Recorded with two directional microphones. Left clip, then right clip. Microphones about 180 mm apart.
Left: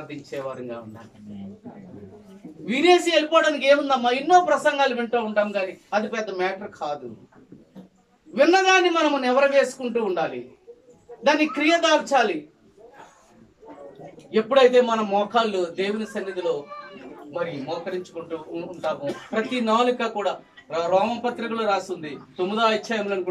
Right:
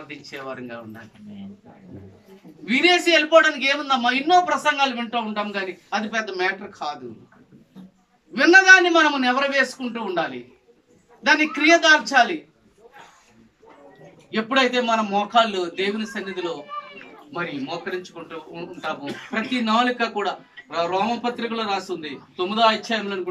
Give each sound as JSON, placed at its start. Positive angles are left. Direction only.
{"t": 2.6, "sound": "a man's voice", "side_deg": 20}
{"t": 8.3, "sound": "a man's voice", "side_deg": 15}
{"t": 14.3, "sound": "a man's voice", "side_deg": 20}